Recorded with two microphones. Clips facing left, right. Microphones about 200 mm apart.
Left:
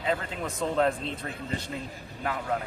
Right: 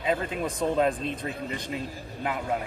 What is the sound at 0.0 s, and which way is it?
Speech, 15° right (ahead or behind).